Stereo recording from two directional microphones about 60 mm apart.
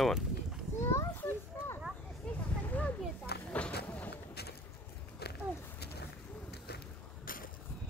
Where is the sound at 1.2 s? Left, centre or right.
Left.